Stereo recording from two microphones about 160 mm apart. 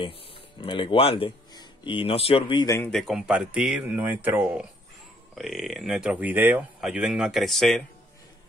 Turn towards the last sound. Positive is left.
turn(degrees=0)  # may be behind; listen again after turning